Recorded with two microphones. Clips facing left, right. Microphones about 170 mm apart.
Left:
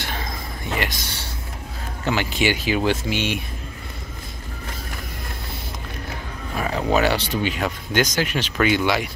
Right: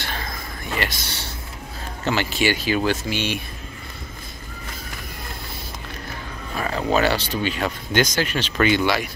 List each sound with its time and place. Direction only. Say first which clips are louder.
0.0 s a sound: left 1 dB; 15° left (ahead or behind)
2.0 s speech: even; 15° left (ahead or behind)
6.5 s speech: left 1 dB; 10° left (ahead or behind)
8.8 s speech: even; 15° left (ahead or behind)